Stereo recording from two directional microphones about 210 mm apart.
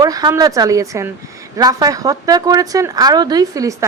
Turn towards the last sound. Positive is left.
turn(degrees=-15)  # may be behind; listen again after turning